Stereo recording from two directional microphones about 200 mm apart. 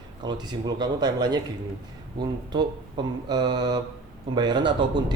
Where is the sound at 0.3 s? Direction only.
20° right (ahead or behind).